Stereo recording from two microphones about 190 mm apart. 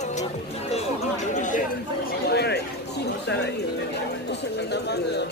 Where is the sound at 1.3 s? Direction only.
40° left (ahead or behind).